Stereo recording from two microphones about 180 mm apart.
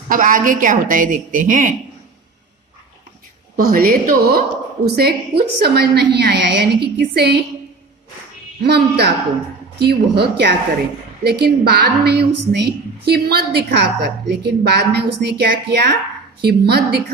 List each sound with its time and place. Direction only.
0.1 s a woman's voice: 50° right (ahead or behind)
3.5 s a woman's voice: 55° right (ahead or behind)
8.6 s a woman's voice: 65° right (ahead or behind)